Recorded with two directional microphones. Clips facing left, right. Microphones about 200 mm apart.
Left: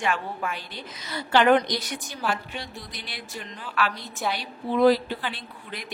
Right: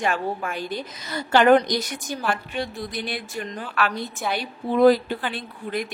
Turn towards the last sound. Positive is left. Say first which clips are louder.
# right 10 dB
turn(degrees=-50)  # may be behind; listen again after turning